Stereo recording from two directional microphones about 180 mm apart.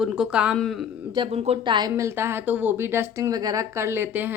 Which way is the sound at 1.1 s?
30° right (ahead or behind).